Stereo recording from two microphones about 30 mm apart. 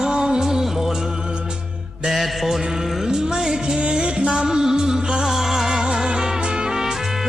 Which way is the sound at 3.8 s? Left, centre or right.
Right.